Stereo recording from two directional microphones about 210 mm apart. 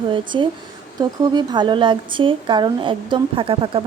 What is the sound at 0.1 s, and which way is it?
Speech, 25° right (ahead or behind).